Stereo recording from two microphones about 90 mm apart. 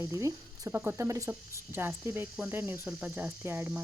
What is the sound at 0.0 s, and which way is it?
Speech, 35° right (ahead or behind).